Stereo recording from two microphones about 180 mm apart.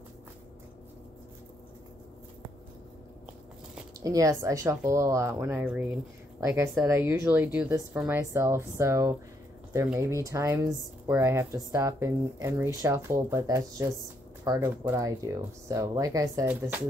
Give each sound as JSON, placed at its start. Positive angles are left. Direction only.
{"t": 4.0, "sound": "speech", "side_deg": -20}
{"t": 10.2, "sound": "speech", "side_deg": -15}